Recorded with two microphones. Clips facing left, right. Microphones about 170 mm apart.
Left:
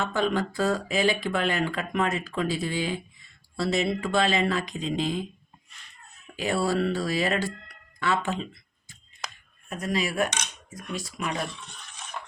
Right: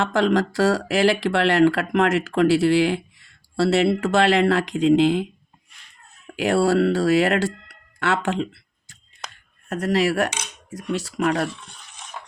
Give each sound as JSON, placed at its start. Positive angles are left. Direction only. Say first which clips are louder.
{"t": 0.0, "sound": "speech", "louder": "right 6 dB", "side_deg": -90}
{"t": 6.3, "sound": "speech", "louder": "right 7 dB", "side_deg": -75}
{"t": 9.3, "sound": "a sound", "louder": "right 13 dB", "side_deg": -70}
{"t": 10.2, "sound": "cutlery", "louder": "right 3 dB", "side_deg": -5}
{"t": 10.9, "sound": "speech", "louder": "right 9 dB", "side_deg": -70}